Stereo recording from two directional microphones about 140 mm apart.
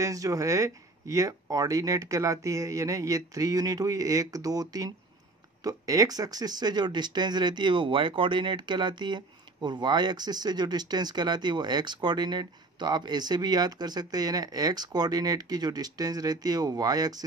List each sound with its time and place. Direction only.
0.0 s speech: 25° right (ahead or behind)